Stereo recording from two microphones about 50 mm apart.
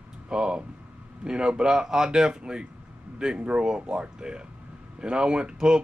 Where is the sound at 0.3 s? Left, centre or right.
Centre.